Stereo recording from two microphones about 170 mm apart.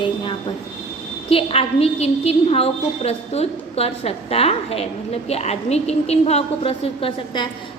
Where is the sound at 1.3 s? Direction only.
35° left (ahead or behind).